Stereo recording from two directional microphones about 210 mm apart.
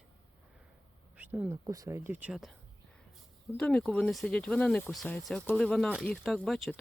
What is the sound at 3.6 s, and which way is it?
Speech, centre (ahead or behind).